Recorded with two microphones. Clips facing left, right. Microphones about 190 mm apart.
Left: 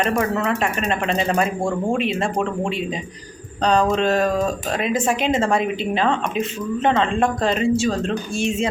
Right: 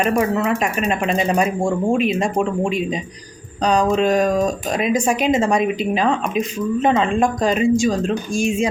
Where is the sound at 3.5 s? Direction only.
10° right (ahead or behind).